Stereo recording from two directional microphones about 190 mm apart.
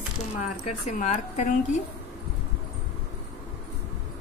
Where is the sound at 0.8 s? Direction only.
35° left (ahead or behind).